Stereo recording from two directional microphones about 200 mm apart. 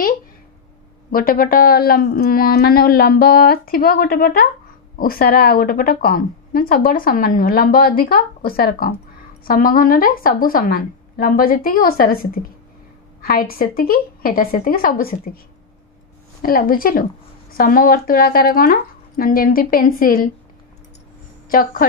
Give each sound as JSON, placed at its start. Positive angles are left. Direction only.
{"t": 1.1, "sound": "a woman's voice", "side_deg": 45}
{"t": 16.4, "sound": "a woman's voice", "side_deg": 45}
{"t": 21.5, "sound": "a woman's voice", "side_deg": 45}